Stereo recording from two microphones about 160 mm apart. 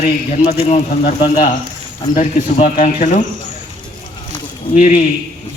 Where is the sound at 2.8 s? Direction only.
50° left (ahead or behind).